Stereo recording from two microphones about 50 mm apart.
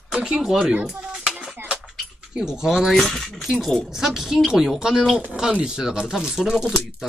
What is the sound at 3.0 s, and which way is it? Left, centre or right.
Speech, centre.